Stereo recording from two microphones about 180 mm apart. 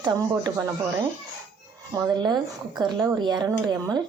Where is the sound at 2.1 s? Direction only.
25° right (ahead or behind).